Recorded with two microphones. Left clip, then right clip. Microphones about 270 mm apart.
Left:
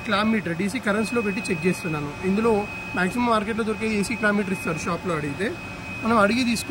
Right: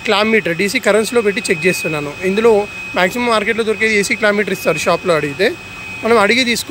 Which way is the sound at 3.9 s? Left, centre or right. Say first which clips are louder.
Right 9 dB; centre.